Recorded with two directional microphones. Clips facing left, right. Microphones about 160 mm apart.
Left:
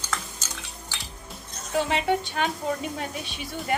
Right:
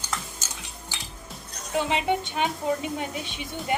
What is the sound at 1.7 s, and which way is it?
Speech, 15° right (ahead or behind).